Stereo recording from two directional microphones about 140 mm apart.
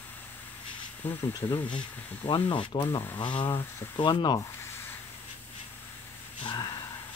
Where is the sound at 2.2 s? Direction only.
35° left (ahead or behind).